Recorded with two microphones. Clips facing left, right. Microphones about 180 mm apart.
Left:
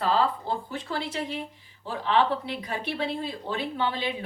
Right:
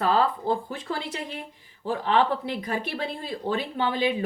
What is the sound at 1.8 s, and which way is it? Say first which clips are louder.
Speech: right 2 dB; 45° right (ahead or behind).